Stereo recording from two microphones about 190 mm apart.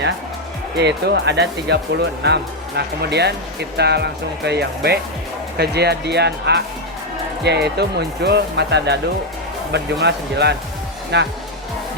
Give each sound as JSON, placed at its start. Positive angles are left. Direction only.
{"t": 0.8, "sound": "speech", "side_deg": -60}